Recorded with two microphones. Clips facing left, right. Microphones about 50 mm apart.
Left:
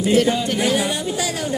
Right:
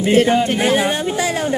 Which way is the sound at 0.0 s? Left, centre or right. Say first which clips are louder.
Right 3 dB; right.